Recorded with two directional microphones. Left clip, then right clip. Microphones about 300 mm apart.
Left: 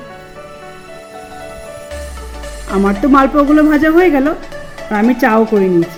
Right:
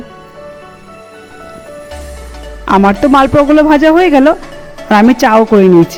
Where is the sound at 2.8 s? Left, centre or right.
Right.